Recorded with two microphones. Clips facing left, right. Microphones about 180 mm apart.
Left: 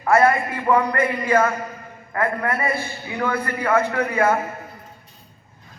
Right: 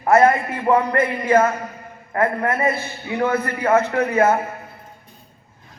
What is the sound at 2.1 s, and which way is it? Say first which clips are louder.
A man's voice: right 3 dB; 25° right (ahead or behind).